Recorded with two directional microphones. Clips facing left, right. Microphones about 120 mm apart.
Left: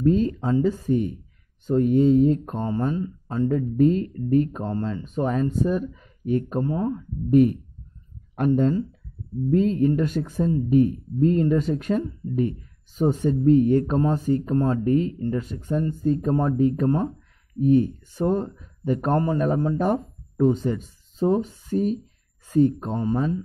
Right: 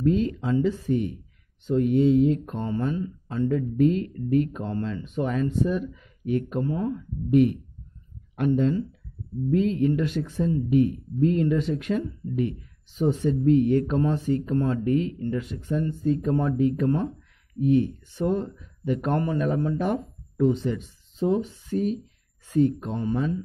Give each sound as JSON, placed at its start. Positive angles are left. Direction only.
{"t": 0.0, "sound": "speech", "side_deg": 40}